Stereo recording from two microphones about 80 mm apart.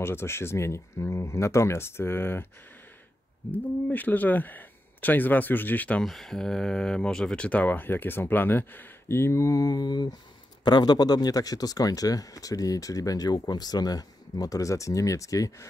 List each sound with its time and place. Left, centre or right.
0.0 s speech: left
3.5 s speech: left
5.9 s speech: centre; by 15.7 s left